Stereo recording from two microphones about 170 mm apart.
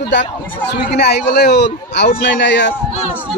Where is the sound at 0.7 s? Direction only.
75° left (ahead or behind).